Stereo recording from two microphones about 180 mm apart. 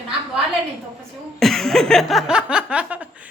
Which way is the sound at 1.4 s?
Centre (ahead or behind).